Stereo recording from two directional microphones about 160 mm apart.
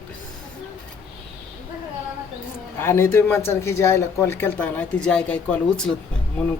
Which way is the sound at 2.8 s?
15° left (ahead or behind).